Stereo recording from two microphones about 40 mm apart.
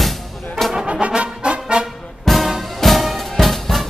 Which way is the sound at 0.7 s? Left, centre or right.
Centre.